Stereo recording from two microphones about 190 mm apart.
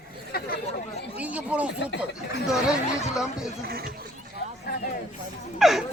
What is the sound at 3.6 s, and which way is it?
Speech, 55° right (ahead or behind).